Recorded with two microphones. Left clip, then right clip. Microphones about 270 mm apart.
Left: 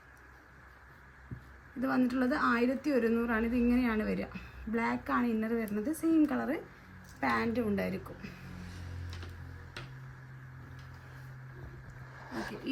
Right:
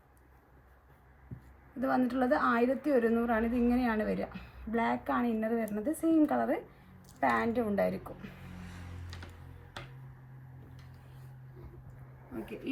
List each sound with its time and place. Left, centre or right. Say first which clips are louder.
1.8 s a woman's voice: right 1 dB; centre